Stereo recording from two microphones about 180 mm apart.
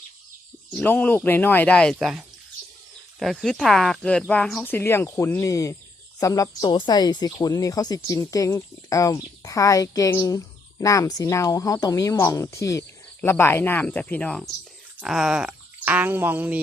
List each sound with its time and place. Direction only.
0.7 s speech: 10° left (ahead or behind); by 16.6 s 10° right (ahead or behind)